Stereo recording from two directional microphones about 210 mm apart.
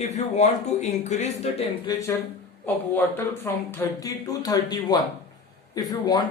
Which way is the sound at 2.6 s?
10° left (ahead or behind).